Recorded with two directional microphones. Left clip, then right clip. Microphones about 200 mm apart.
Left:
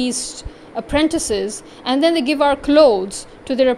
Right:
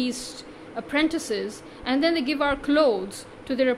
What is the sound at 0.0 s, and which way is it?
A woman's voice, 25° left (ahead or behind).